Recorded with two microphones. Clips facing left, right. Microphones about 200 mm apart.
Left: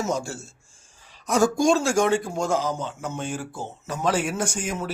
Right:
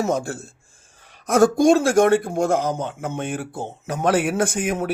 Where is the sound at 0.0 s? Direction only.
55° right (ahead or behind).